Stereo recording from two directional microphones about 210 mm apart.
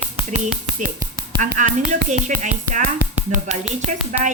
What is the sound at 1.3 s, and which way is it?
Speech, 40° right (ahead or behind).